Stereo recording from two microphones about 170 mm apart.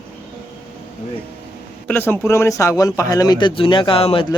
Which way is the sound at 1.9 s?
10° left (ahead or behind).